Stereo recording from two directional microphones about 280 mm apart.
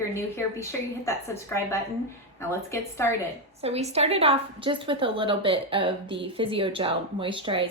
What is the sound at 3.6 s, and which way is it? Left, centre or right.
Speech, right.